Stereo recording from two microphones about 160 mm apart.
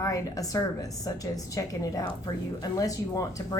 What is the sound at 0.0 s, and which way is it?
A woman's voice, 20° left (ahead or behind).